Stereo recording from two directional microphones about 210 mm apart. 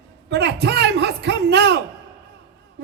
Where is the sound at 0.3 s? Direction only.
55° right (ahead or behind).